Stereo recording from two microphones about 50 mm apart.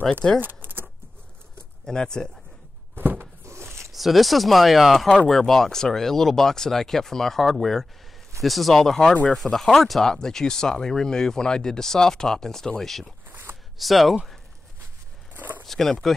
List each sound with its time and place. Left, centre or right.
0.4 s keys jangling: right
1.9 s speech: centre
3.0 s a sound: right
3.9 s speech: centre
13.3 s a sound: right
13.7 s speech: centre
15.3 s zipper: right
15.6 s speech: centre